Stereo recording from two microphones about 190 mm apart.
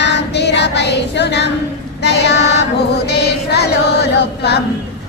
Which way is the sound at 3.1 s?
60° left (ahead or behind).